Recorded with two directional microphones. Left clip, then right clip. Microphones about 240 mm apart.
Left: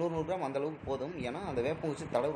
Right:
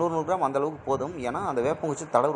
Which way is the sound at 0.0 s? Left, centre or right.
Centre.